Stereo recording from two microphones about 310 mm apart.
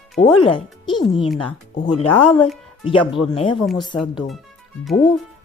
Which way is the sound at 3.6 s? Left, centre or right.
Centre.